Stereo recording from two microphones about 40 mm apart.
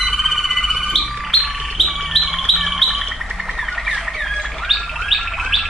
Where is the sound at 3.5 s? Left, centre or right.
Centre.